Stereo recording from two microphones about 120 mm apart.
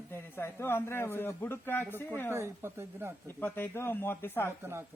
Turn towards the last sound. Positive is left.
turn(degrees=-20)  # may be behind; listen again after turning